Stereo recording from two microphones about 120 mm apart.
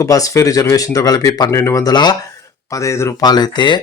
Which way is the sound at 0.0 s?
25° left (ahead or behind).